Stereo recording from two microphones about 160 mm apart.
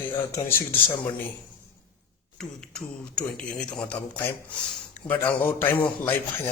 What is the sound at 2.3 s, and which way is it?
Speech, 5° left (ahead or behind).